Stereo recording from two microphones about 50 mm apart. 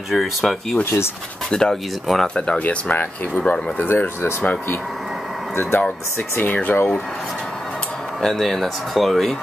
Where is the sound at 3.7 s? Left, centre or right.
Left.